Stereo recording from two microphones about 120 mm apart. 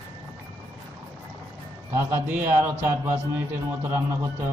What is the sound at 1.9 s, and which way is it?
A man's voice, 15° right (ahead or behind).